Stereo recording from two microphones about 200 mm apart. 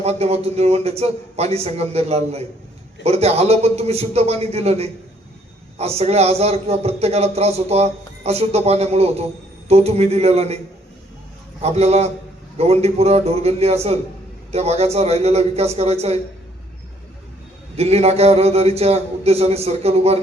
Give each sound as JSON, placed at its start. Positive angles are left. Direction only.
{"t": 0.0, "sound": "speech", "side_deg": -30}
{"t": 6.0, "sound": "speech", "side_deg": -30}
{"t": 11.6, "sound": "speech", "side_deg": -30}
{"t": 17.7, "sound": "speech", "side_deg": -30}